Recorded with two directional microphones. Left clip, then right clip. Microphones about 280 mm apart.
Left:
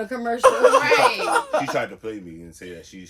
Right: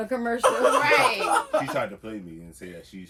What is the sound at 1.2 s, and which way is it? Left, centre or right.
Speech, left.